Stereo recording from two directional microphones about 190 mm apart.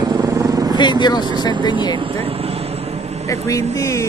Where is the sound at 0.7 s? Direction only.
25° left (ahead or behind).